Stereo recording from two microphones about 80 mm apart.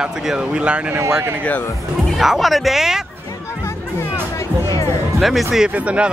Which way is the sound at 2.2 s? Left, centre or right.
Centre.